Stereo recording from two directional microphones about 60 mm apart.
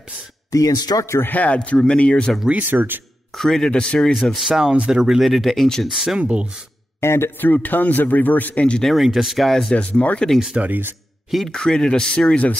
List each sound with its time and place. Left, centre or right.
0.5 s speech: left
1.2 s speech: left
2.7 s speech: right
3.3 s speech: centre
4.5 s speech: centre
5.9 s speech: centre
6.1 s speech: centre
7.0 s a man's voice: left
7.3 s speech: left
8.8 s speech: centre
9.8 s speech: centre
10.5 s speech: right
11.2 s speech: centre
11.5 s speech: centre